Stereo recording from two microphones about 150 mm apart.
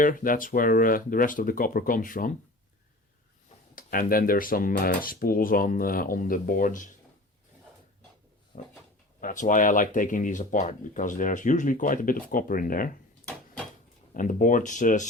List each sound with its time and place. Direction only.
0.0 s speech: 65° left (ahead or behind)
3.8 s speech: 70° left (ahead or behind)
8.5 s a sound: 60° left (ahead or behind)
9.2 s speech: 60° left (ahead or behind)
14.1 s speech: 60° left (ahead or behind)